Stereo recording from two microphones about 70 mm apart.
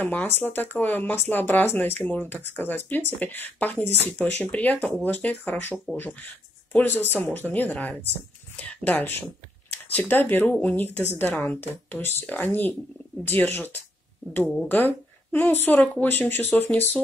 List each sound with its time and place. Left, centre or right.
0.0 s speech: left
14.7 s speech: left